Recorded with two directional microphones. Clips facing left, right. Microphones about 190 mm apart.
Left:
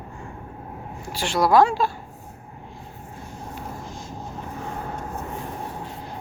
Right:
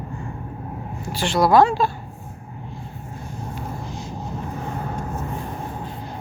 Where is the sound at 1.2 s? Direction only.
10° left (ahead or behind).